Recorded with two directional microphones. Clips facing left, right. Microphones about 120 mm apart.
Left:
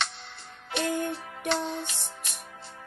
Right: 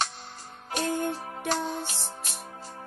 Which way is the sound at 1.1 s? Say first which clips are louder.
Even; 40° right (ahead or behind).